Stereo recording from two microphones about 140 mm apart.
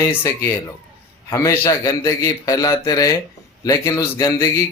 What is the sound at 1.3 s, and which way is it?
Speech, 20° left (ahead or behind).